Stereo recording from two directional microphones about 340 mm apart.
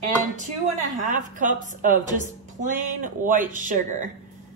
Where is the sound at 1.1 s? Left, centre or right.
Right.